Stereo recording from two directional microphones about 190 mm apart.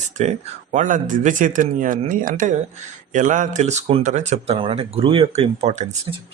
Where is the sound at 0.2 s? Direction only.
40° right (ahead or behind).